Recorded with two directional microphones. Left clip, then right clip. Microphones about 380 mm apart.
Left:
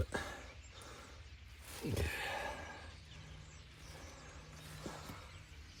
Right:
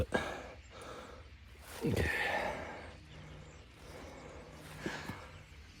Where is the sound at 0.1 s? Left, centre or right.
Centre.